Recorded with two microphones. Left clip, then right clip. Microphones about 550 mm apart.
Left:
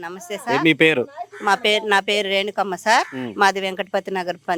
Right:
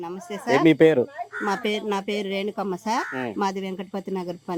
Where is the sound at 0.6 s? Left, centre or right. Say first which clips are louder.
Left 1 dB; centre.